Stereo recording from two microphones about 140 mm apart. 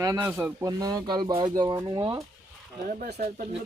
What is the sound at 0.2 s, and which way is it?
Speech, 15° right (ahead or behind).